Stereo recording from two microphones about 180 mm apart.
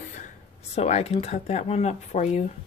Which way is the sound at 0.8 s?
35° left (ahead or behind).